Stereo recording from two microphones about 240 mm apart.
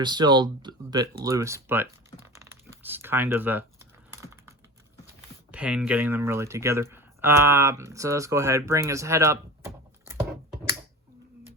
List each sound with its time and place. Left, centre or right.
0.0 s speech: centre
2.2 s crumpling: centre
5.5 s speech: centre